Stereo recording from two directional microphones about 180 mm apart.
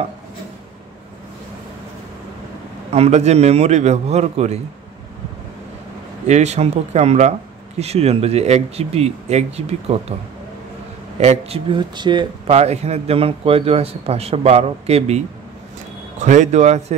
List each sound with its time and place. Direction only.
2.9 s a man's voice: 35° right (ahead or behind)
6.2 s a man's voice: 40° right (ahead or behind)
11.1 s a man's voice: 35° right (ahead or behind)